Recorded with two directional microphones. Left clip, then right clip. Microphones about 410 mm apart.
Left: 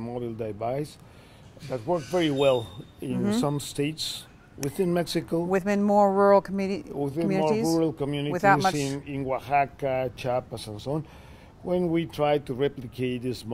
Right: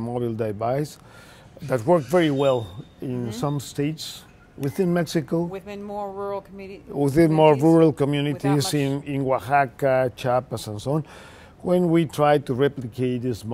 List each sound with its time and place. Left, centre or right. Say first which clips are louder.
0.0 s speech: right 6 dB; right
1.7 s speech: right 8 dB; right
2.1 s speech: right 3 dB; centre
5.5 s speech: left 10 dB; left
7.1 s speech: right 10 dB; right; by 13.5 s centre